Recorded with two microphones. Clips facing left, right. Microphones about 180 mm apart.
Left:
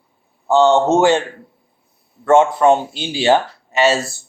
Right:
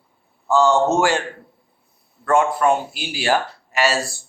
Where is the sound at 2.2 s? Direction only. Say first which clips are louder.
Left 5 dB; 25° left (ahead or behind).